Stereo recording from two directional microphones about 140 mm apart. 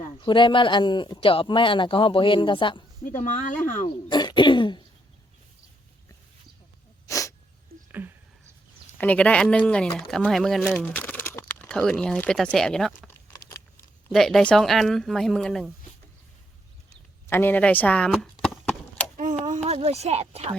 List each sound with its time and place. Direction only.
0.2 s speech: 35° left (ahead or behind)
3.2 s speech: 60° left (ahead or behind)
4.1 s speech: 35° left (ahead or behind)
7.1 s sneeze: 25° left (ahead or behind)
7.7 s a sound: 90° right
9.0 s speech: 10° left (ahead or behind)
10.8 s crumpling: 15° left (ahead or behind)
11.7 s speech: 5° left (ahead or behind)
14.1 s speech: centre (ahead or behind)
17.2 s speech: 15° left (ahead or behind)
18.4 s horse: 5° left (ahead or behind)
19.1 s a sound: 60° right (ahead or behind)
19.6 s speech: 45° right (ahead or behind)